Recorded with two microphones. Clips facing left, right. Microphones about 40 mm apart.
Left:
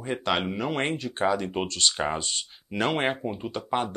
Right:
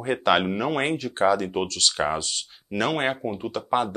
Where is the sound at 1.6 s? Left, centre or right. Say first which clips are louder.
Right 1 dB; centre.